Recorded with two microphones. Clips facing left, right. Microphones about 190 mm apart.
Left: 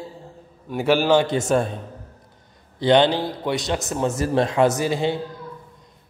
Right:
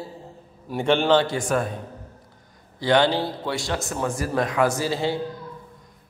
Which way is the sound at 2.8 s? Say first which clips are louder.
Left 3 dB; 20° left (ahead or behind).